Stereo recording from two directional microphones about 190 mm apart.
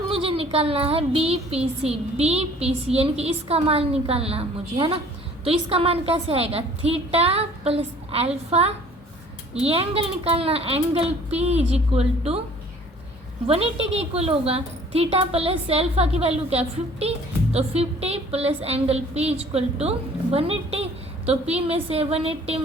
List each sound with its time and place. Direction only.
0.1 s a woman's voice: 30° right (ahead or behind)
13.5 s a woman's voice: 30° right (ahead or behind)